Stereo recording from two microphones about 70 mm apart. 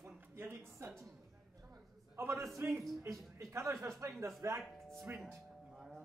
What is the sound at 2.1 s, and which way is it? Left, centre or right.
Speech, right.